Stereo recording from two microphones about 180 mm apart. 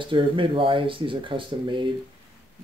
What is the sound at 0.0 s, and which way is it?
Speech, 30° right (ahead or behind).